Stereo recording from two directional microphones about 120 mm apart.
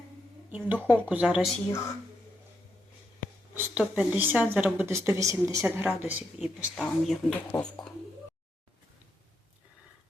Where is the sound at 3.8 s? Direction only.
10° right (ahead or behind).